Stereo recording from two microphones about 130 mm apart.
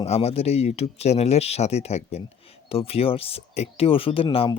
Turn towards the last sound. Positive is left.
turn(degrees=40)  # may be behind; listen again after turning